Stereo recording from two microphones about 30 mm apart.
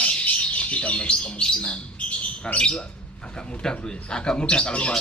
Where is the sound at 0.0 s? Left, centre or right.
Left.